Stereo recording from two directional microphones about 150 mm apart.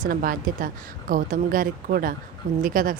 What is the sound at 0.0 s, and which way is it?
A woman's voice, 70° right (ahead or behind).